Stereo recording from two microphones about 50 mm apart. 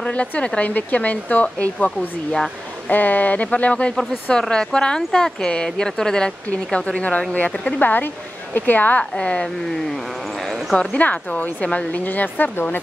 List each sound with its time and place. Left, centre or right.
0.0 s a woman's voice: left
2.9 s a woman's voice: left
4.3 s a woman's voice: centre
7.8 s a woman's voice: left
9.1 s a woman's voice: centre
10.4 s a sound: centre
10.8 s a woman's voice: left